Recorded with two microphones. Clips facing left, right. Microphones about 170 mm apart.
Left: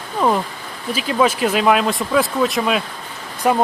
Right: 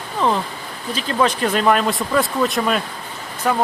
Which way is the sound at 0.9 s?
10° left (ahead or behind).